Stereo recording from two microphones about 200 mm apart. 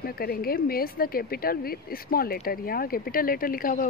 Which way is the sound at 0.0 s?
50° left (ahead or behind).